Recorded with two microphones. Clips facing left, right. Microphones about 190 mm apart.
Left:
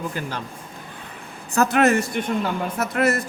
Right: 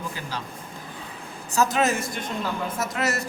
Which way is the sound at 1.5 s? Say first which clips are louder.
Left 5 dB; 60° left (ahead or behind).